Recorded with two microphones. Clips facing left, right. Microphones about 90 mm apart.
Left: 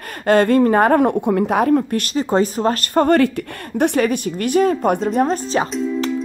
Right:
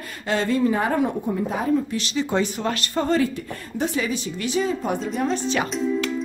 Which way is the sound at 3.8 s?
60° left (ahead or behind).